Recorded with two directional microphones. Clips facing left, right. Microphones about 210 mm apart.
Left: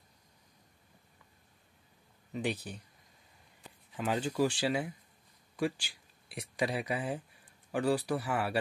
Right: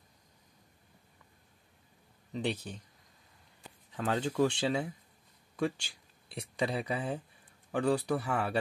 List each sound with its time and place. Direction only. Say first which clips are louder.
2.3 s speech: right 1 dB; 10° left (ahead or behind)
3.9 s speech: right 1 dB; 10° left (ahead or behind)